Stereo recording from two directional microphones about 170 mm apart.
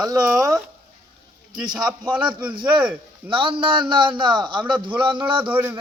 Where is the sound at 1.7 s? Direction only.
5° right (ahead or behind).